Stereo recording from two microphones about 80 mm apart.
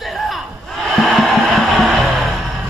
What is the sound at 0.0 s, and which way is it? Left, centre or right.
Music, centre.